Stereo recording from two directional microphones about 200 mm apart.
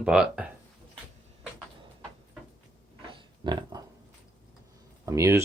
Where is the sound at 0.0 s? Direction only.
5° right (ahead or behind).